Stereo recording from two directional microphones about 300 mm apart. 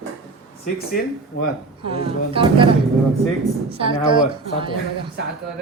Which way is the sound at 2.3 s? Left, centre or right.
Centre.